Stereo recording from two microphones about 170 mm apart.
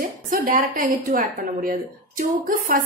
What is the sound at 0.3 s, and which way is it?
A woman's voice, 55° right (ahead or behind).